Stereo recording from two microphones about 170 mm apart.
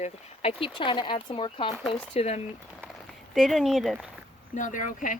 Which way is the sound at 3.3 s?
Centre (ahead or behind).